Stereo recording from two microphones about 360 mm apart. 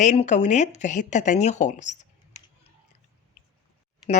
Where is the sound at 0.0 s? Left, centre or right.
Centre.